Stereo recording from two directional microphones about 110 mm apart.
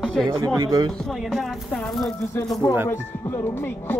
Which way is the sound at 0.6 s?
35° right (ahead or behind).